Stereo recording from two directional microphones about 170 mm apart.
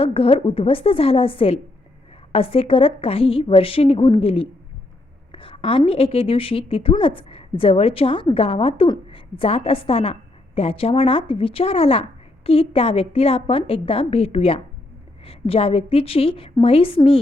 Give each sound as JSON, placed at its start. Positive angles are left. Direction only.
{"t": 0.0, "sound": "a woman's voice", "side_deg": 35}